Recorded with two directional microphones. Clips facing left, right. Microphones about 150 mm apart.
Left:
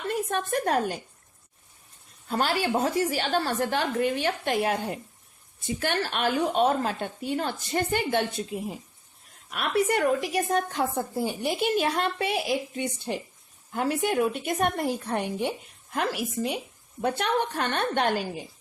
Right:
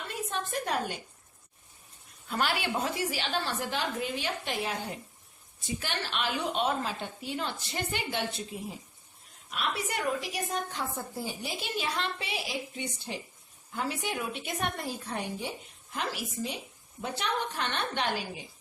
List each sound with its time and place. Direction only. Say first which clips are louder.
0.1 s a woman's voice: left 7 dB; 50° left (ahead or behind)
2.2 s speech: left 5 dB; 40° left (ahead or behind)
9.5 s a woman's voice: left 9 dB; 55° left (ahead or behind)